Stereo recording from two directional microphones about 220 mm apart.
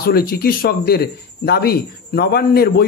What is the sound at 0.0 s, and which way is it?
Speech, 45° left (ahead or behind).